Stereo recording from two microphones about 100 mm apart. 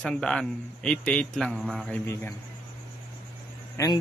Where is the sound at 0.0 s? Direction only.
5° left (ahead or behind).